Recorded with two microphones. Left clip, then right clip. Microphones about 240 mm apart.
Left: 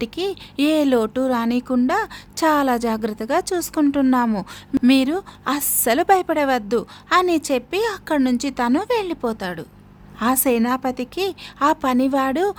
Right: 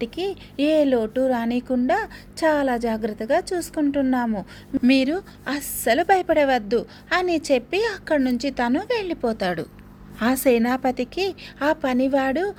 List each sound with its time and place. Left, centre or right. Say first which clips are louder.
0.0 s a woman's voice: left 2 dB; centre